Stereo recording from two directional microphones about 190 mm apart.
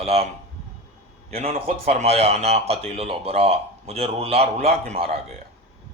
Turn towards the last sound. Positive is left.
turn(degrees=-35)  # may be behind; listen again after turning